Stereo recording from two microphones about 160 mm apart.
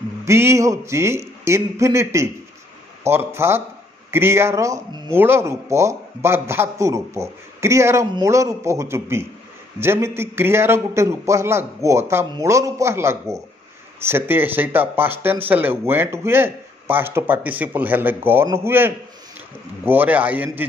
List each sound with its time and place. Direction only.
0.2 s a man's voice: 15° right (ahead or behind)